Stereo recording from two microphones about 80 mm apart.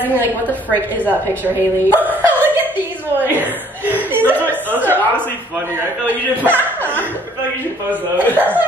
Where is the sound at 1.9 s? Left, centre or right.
Right.